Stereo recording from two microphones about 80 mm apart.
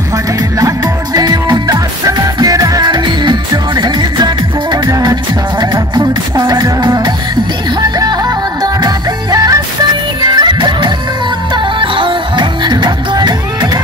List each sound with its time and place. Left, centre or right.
0.6 s music: right
2.8 s music: right
8.0 s music: right
10.5 s music: right